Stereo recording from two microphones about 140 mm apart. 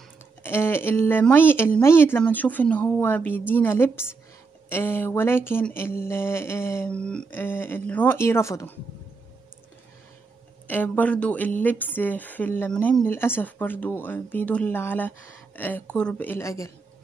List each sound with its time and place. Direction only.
0.4 s speech: 15° left (ahead or behind)
7.0 s speech: 5° left (ahead or behind)
10.7 s speech: 10° left (ahead or behind)